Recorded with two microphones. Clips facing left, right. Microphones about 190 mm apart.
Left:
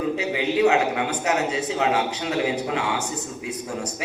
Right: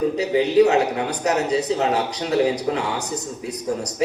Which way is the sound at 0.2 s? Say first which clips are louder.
Right 6 dB; 40° right (ahead or behind).